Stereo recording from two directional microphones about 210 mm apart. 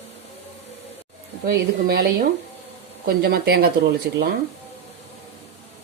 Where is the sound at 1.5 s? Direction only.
45° right (ahead or behind).